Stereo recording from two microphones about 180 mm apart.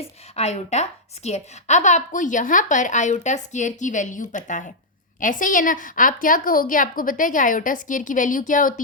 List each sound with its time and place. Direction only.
0.3 s a woman's voice: 35° left (ahead or behind)